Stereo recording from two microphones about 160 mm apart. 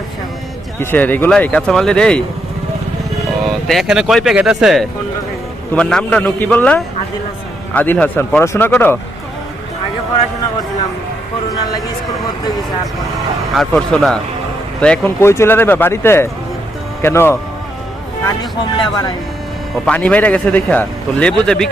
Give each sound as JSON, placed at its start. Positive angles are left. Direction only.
{"t": 0.8, "sound": "a man's voice", "side_deg": 10}
{"t": 3.7, "sound": "a man's voice", "side_deg": 0}
{"t": 13.6, "sound": "a man's voice", "side_deg": 0}
{"t": 18.8, "sound": "speech", "side_deg": 25}
{"t": 19.8, "sound": "a man's voice", "side_deg": 10}